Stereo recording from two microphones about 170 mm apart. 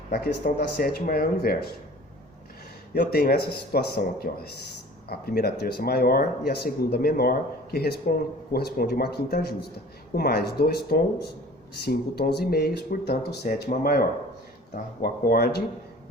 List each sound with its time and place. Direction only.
0.1 s speech: 60° left (ahead or behind)
2.9 s speech: 60° left (ahead or behind)
13.5 s speech: 60° left (ahead or behind)
15.0 s speech: 60° left (ahead or behind)